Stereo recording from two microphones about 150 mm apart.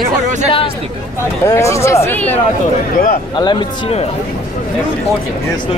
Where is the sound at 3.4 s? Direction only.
30° left (ahead or behind).